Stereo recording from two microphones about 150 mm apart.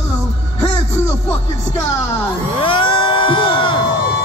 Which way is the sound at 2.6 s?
35° left (ahead or behind).